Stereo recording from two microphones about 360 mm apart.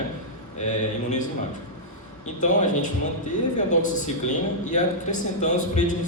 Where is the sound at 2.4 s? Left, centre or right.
Left.